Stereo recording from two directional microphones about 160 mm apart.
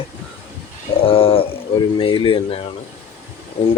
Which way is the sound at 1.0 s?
35° left (ahead or behind).